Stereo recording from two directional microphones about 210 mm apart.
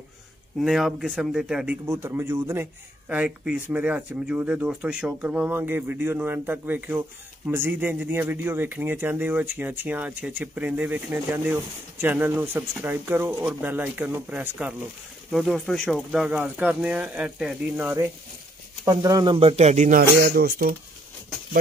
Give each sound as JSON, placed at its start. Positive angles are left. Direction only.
{"t": 0.6, "sound": "speech", "side_deg": 0}